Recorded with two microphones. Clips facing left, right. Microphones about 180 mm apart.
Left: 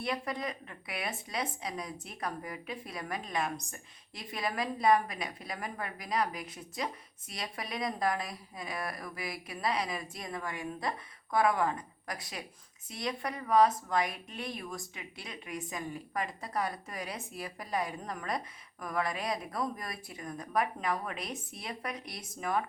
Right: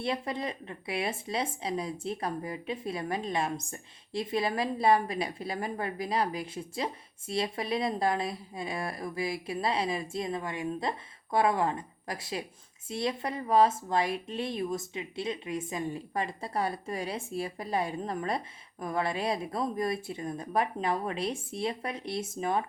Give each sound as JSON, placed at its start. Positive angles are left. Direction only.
{"t": 0.0, "sound": "speech", "side_deg": -25}